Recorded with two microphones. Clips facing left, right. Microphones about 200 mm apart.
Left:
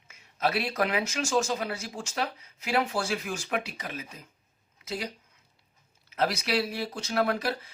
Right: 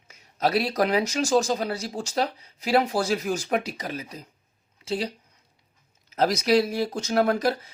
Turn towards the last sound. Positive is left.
turn(degrees=-40)  # may be behind; listen again after turning